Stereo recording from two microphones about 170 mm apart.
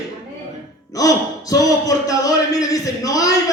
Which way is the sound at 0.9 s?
20° left (ahead or behind).